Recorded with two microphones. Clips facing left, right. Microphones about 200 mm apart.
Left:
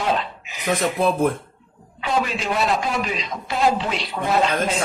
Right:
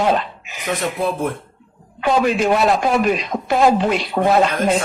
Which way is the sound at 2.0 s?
50° right (ahead or behind).